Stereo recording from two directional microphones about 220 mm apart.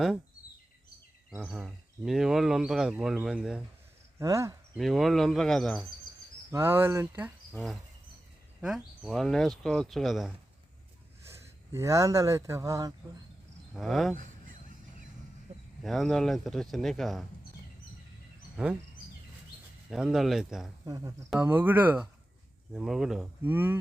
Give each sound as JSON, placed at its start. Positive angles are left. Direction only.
{"t": 1.5, "sound": "speech", "side_deg": -5}
{"t": 4.2, "sound": "speech", "side_deg": -15}
{"t": 4.8, "sound": "speech", "side_deg": 0}
{"t": 6.5, "sound": "speech", "side_deg": -10}
{"t": 11.3, "sound": "speech", "side_deg": -15}
{"t": 13.7, "sound": "speech", "side_deg": 0}
{"t": 14.2, "sound": "honk", "side_deg": -35}
{"t": 15.8, "sound": "speech", "side_deg": 0}
{"t": 18.5, "sound": "speech", "side_deg": -5}
{"t": 19.9, "sound": "speech", "side_deg": 0}
{"t": 20.8, "sound": "speech", "side_deg": -15}